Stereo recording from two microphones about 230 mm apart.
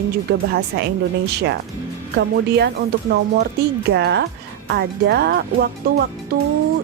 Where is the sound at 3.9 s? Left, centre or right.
Right.